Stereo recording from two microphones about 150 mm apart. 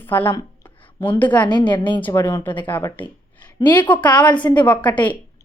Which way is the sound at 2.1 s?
20° left (ahead or behind).